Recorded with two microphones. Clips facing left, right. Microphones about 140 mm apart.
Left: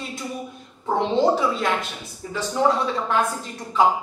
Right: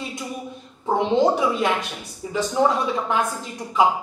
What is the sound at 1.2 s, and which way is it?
A woman's voice, 15° right (ahead or behind).